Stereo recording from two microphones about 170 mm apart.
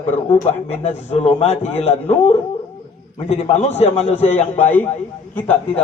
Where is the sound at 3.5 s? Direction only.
40° left (ahead or behind).